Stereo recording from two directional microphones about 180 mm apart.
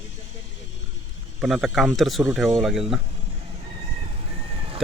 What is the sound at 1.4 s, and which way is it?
Speech, centre (ahead or behind).